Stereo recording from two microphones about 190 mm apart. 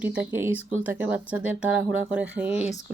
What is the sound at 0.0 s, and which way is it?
Speech, 5° right (ahead or behind).